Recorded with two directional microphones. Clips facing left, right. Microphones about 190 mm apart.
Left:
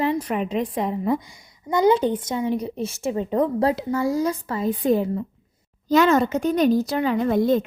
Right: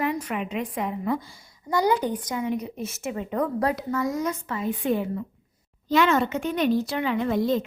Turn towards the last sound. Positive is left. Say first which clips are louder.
# left 4 dB
turn(degrees=50)  # may be behind; listen again after turning